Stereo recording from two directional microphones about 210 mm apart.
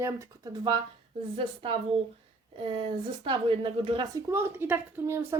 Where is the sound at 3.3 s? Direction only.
25° right (ahead or behind).